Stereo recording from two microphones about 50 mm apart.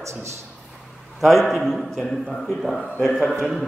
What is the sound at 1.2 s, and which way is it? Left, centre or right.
A man's voice, centre.